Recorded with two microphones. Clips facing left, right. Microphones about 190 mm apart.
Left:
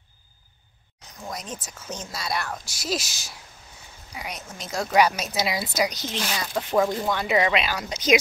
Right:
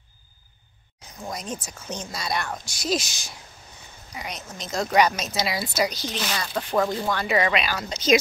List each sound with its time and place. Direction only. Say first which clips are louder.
1.3 s a woman's voice: right 3 dB; centre (ahead or behind); by 6.3 s 15° left (ahead or behind)
6.5 s a woman's voice: left 2 dB; 5° left (ahead or behind)
7.1 s speech: left 1 dB; 15° left (ahead or behind)